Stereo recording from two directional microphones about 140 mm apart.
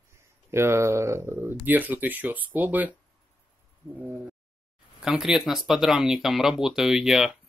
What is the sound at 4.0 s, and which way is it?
Speech, 15° right (ahead or behind).